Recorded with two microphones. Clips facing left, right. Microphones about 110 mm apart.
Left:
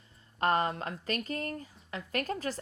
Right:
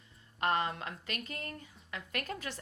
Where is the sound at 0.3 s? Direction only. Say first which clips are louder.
Left 4 dB; 35° left (ahead or behind).